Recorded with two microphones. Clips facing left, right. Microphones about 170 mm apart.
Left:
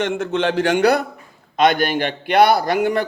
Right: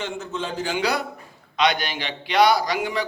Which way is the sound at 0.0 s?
70° left (ahead or behind).